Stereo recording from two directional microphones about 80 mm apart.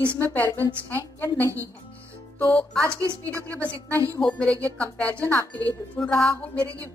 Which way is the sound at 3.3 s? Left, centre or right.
Left.